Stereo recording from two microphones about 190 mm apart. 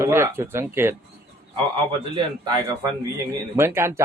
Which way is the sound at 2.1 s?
20° right (ahead or behind).